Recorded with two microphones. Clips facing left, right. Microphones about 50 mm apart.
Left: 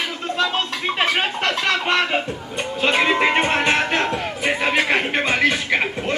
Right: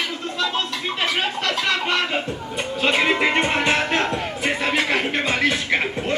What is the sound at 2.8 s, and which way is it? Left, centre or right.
Music, centre.